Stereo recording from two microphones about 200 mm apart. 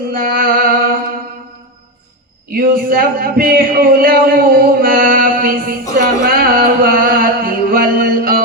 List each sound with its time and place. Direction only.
0.1 s a sound: 45° right (ahead or behind)
2.5 s speech: 45° right (ahead or behind)
6.0 s music: 45° right (ahead or behind)